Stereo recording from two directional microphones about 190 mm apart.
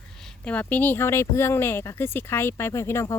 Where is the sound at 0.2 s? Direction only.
5° left (ahead or behind).